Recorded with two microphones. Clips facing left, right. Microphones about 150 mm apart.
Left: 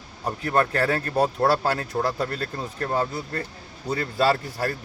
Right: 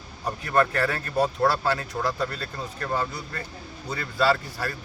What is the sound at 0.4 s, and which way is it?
Speech, 30° left (ahead or behind).